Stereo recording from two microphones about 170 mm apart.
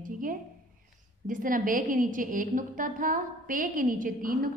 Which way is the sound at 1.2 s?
50° right (ahead or behind).